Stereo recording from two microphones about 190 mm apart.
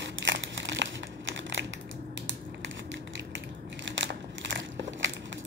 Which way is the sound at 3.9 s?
75° right (ahead or behind).